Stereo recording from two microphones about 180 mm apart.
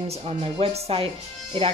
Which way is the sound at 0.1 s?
35° right (ahead or behind).